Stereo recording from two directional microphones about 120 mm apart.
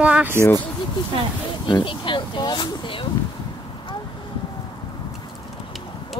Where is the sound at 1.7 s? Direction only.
40° left (ahead or behind).